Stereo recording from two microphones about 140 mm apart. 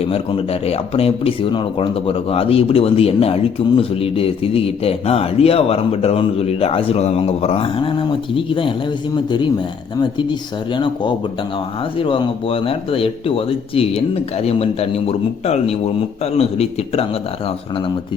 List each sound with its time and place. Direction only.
0.0 s speech: 40° left (ahead or behind)